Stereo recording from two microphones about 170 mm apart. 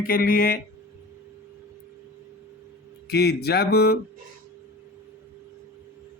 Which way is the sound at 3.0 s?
70° left (ahead or behind).